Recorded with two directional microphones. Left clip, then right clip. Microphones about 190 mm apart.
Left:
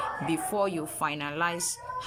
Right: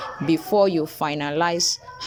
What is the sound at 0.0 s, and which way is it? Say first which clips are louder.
Speech: right 6 dB; 25° right (ahead or behind).